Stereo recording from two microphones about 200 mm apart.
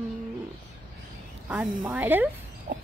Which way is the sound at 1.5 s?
5° right (ahead or behind).